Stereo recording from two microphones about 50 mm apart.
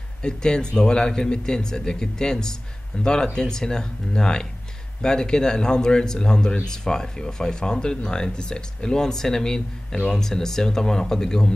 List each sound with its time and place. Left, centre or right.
0.2 s speech: centre